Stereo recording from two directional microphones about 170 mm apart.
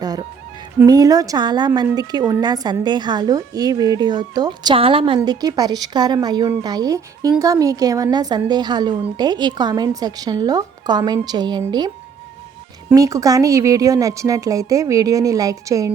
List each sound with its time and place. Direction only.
0.0 s music: 25° right (ahead or behind)
0.8 s a woman's voice: 20° right (ahead or behind)
12.9 s a woman's voice: 20° right (ahead or behind)